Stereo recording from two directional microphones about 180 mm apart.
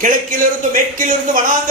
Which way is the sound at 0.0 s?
50° right (ahead or behind).